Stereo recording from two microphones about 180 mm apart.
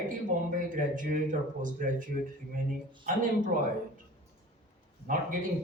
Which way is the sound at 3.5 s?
50° right (ahead or behind).